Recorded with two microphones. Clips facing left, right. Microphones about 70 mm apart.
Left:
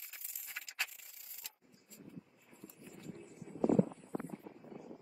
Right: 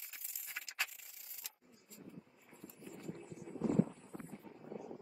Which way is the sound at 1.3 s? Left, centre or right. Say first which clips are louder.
Even; centre.